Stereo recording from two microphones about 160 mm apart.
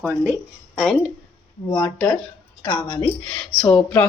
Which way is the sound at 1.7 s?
20° left (ahead or behind).